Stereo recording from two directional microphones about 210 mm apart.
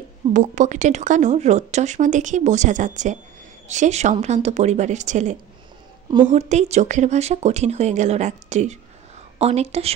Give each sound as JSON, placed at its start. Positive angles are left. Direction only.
{"t": 0.3, "sound": "a woman's voice", "side_deg": -35}